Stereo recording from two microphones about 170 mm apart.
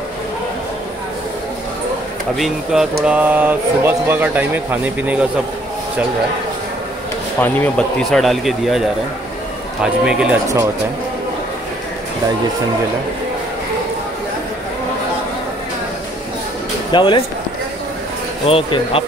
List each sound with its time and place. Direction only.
2.3 s speech: centre (ahead or behind)
7.3 s speech: 10° left (ahead or behind); by 10.4 s 5° right (ahead or behind)
16.9 s speech: 30° left (ahead or behind)
18.5 s speech: 35° left (ahead or behind)